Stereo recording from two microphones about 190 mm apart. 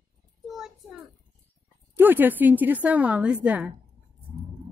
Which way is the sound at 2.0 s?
10° right (ahead or behind).